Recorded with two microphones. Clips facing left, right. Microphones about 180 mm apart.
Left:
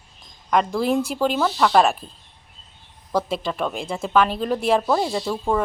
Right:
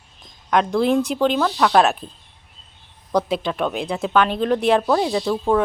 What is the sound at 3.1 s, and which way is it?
Speech, centre (ahead or behind).